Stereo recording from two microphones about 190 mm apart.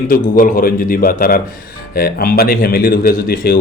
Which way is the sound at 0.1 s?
45° left (ahead or behind).